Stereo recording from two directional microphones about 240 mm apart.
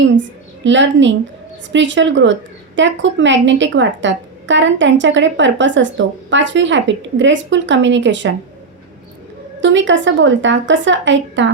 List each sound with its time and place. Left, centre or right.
0.6 s a woman's voice: right
9.6 s a woman's voice: right